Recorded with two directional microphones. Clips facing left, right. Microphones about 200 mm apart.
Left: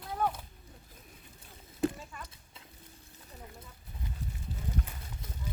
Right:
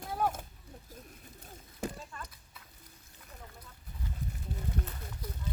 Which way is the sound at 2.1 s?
5° left (ahead or behind).